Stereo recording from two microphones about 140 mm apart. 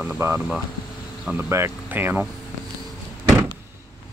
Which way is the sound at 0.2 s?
20° right (ahead or behind).